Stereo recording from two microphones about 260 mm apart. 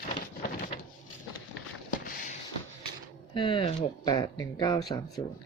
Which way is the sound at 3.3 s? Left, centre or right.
Centre.